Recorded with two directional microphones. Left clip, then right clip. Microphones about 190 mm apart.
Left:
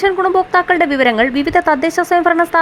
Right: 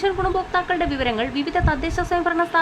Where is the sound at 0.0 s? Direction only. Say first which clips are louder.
Left 8 dB; 30° left (ahead or behind).